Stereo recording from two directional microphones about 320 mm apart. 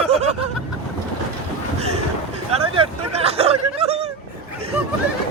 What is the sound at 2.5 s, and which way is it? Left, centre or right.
Hubbub, centre.